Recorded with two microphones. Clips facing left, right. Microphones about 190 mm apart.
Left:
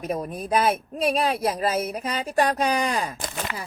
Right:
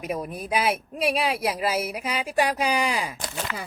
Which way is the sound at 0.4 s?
5° right (ahead or behind).